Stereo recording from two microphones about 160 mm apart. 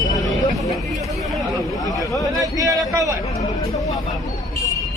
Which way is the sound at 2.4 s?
20° right (ahead or behind).